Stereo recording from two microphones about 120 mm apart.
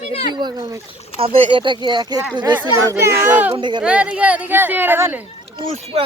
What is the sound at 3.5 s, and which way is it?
Speech, 40° right (ahead or behind).